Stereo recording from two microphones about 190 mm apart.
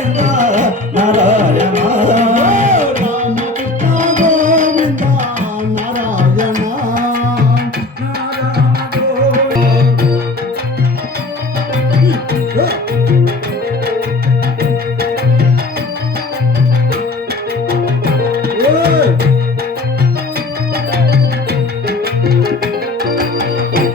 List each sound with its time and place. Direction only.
0.2 s music: 40° right (ahead or behind)
6.0 s tabla: 45° right (ahead or behind)
12.0 s music: 55° right (ahead or behind)
18.4 s music: 55° right (ahead or behind)
21.8 s music: 55° right (ahead or behind)